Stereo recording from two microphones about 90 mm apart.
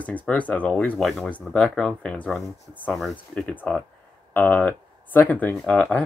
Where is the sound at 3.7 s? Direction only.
10° left (ahead or behind).